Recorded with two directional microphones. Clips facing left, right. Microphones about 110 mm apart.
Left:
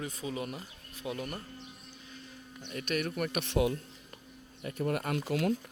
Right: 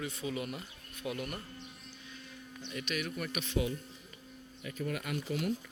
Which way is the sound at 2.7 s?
45° left (ahead or behind).